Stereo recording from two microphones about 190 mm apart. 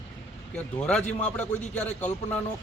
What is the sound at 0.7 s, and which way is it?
Speech, 5° left (ahead or behind).